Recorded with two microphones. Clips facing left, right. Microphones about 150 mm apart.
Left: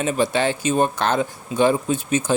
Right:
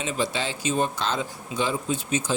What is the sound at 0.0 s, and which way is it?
Speech, 55° left (ahead or behind).